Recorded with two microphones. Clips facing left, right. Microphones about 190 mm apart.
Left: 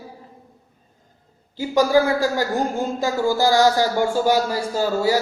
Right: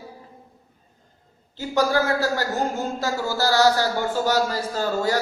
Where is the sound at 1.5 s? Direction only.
10° left (ahead or behind).